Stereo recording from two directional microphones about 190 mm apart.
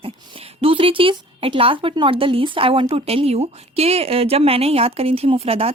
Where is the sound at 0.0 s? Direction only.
30° right (ahead or behind).